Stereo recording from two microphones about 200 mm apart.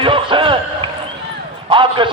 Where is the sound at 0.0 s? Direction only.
25° right (ahead or behind).